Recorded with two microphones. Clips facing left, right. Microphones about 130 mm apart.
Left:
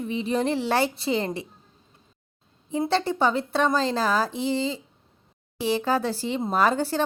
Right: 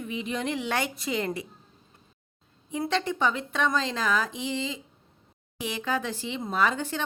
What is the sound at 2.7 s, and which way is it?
Speech, 30° left (ahead or behind).